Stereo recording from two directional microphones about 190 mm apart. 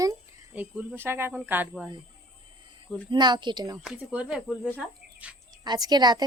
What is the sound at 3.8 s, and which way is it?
Speech, 5° right (ahead or behind).